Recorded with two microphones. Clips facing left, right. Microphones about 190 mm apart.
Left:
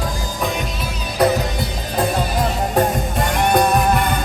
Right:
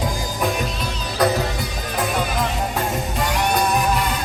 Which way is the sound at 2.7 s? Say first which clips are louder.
Left 5 dB; 55° left (ahead or behind).